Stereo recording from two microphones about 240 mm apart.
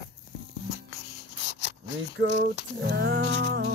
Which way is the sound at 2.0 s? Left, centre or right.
Right.